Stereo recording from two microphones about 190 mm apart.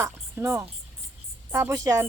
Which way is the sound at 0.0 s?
15° right (ahead or behind).